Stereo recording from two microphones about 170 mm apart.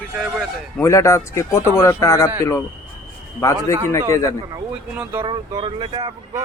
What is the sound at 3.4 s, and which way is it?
Speech, 15° left (ahead or behind).